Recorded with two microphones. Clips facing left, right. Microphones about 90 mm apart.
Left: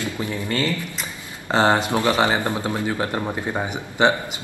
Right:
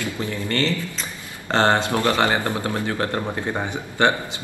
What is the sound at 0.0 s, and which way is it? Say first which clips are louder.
Speech: even; 20° left (ahead or behind).